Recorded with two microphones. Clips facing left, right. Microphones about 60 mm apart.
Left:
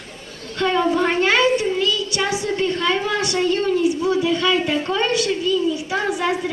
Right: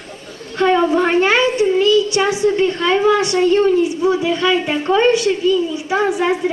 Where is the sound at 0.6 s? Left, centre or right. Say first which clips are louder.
Right 4 dB; right.